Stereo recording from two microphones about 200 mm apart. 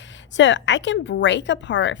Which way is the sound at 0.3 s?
65° left (ahead or behind).